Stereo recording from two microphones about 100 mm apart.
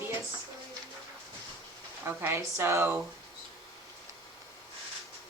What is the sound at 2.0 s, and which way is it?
Speech, 25° right (ahead or behind).